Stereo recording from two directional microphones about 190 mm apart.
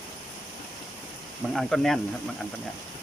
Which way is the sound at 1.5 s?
Centre (ahead or behind).